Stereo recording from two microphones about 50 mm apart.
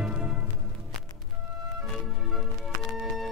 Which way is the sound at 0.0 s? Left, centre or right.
Right.